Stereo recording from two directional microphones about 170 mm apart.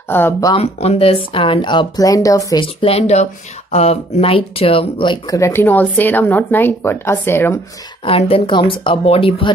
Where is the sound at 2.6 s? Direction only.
35° left (ahead or behind); by 7.5 s 15° left (ahead or behind).